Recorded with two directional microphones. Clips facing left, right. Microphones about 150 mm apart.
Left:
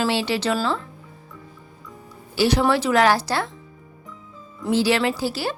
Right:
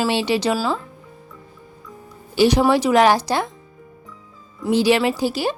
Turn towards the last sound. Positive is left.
turn(degrees=-15)  # may be behind; listen again after turning